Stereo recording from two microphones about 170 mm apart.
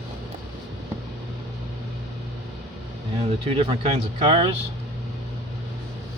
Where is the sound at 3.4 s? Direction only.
35° right (ahead or behind).